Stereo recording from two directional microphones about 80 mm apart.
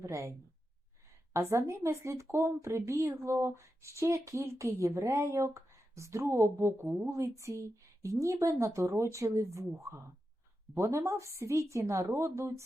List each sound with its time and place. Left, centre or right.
0.0 s a woman's voice: right